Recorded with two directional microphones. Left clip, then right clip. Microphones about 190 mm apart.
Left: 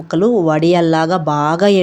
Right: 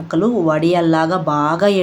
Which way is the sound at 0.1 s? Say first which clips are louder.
Left 3 dB; 30° left (ahead or behind).